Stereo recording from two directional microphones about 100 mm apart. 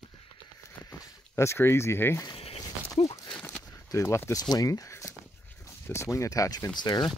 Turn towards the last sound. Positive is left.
turn(degrees=45)  # may be behind; listen again after turning